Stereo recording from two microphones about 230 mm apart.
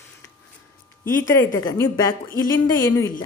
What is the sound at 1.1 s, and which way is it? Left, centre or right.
Speech, centre.